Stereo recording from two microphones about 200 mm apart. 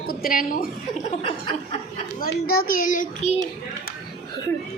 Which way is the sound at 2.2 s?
50° left (ahead or behind).